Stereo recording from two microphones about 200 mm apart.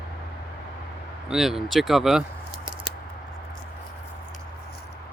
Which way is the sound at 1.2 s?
Centre (ahead or behind).